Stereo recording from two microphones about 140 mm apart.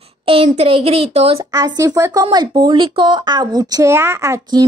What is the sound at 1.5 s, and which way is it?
Speech, 25° right (ahead or behind).